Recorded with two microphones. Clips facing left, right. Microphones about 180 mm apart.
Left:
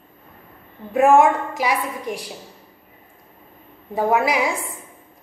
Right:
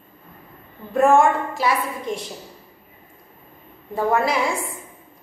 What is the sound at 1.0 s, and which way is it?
A woman's voice, 15° left (ahead or behind).